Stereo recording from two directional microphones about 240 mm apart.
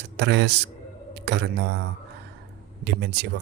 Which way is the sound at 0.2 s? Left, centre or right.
Right.